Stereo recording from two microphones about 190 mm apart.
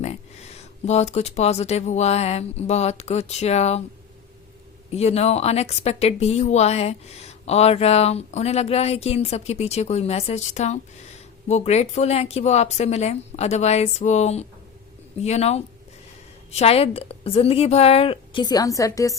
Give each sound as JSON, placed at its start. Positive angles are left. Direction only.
{"t": 0.9, "sound": "speech", "side_deg": 35}
{"t": 4.9, "sound": "speech", "side_deg": 35}